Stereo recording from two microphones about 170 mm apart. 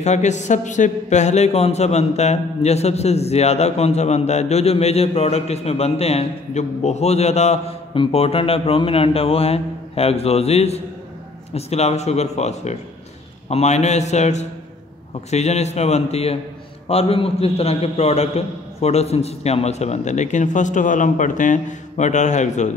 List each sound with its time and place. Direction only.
0.0 s a man's voice: 45° left (ahead or behind)